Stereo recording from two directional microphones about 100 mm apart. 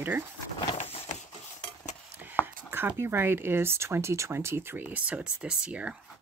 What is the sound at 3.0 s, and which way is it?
Speech, 20° right (ahead or behind).